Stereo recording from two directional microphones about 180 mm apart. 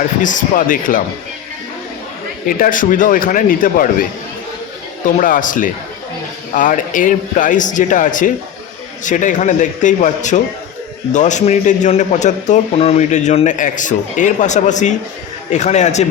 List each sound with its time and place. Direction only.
0.2 s a man's voice: 45° left (ahead or behind)
2.5 s a man's voice: 50° left (ahead or behind)
5.1 s a man's voice: 50° left (ahead or behind)